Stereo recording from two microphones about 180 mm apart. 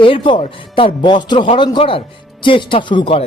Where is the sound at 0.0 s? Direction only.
30° left (ahead or behind).